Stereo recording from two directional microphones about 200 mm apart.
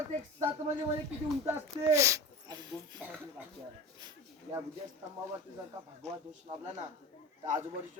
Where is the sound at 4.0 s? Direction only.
15° right (ahead or behind).